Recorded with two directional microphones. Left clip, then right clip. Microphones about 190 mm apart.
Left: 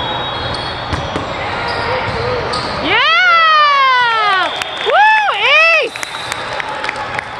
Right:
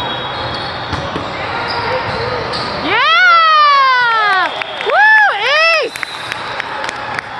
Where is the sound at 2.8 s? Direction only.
Centre (ahead or behind).